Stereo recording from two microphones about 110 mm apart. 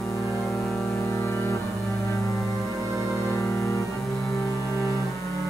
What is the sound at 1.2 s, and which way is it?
Cello, 20° left (ahead or behind).